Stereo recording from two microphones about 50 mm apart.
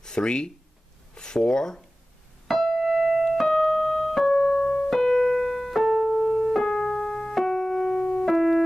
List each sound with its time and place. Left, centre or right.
0.0 s speech: centre
2.4 s keyboard: centre
3.5 s keyboard: centre